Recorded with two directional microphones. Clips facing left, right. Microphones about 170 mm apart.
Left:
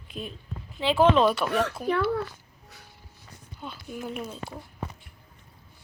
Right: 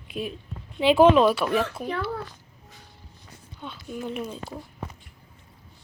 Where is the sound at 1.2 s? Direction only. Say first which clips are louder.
Right 2 dB; centre (ahead or behind).